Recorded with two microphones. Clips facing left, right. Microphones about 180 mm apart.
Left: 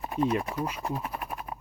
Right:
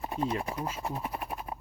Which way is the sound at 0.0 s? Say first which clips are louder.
Left 4 dB; 30° right (ahead or behind).